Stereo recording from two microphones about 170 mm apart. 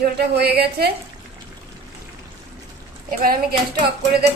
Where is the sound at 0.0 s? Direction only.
70° right (ahead or behind).